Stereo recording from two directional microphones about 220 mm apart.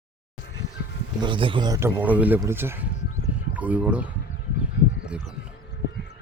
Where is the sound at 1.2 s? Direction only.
20° right (ahead or behind); by 5.3 s 5° right (ahead or behind).